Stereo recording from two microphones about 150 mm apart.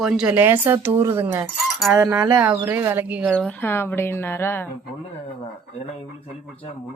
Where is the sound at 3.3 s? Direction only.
10° left (ahead or behind).